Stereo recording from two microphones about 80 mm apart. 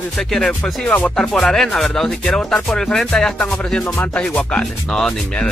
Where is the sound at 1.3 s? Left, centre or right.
Centre.